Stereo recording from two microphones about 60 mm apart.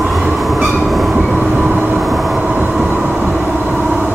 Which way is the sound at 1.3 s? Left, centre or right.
Centre.